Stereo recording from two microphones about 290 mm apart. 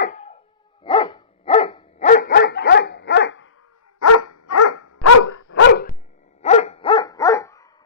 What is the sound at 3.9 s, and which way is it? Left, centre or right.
Dog, left.